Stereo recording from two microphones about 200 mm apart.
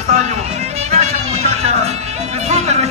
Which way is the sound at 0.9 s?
30° right (ahead or behind).